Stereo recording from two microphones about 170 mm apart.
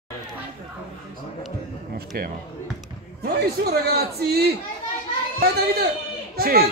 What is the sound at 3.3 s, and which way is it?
A man's voice, 70° right (ahead or behind).